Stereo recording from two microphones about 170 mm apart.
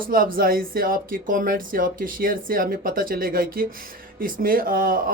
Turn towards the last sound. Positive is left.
turn(degrees=-60)  # may be behind; listen again after turning